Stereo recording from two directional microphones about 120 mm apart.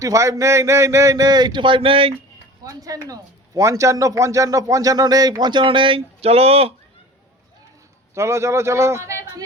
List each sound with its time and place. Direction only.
0.0 s speech: 25° right (ahead or behind); by 2.1 s 50° right (ahead or behind)
2.6 s a man's voice: 30° right (ahead or behind); by 6.7 s 55° right (ahead or behind)
8.1 s speech: 25° right (ahead or behind)